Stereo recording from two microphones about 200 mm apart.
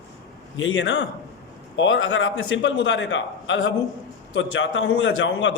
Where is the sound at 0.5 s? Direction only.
70° left (ahead or behind).